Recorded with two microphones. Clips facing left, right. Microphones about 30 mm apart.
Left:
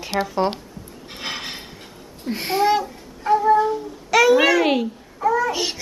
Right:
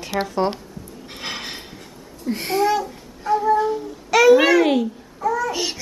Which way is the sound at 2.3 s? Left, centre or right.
Centre.